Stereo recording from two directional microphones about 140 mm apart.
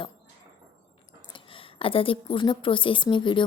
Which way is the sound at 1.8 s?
40° left (ahead or behind).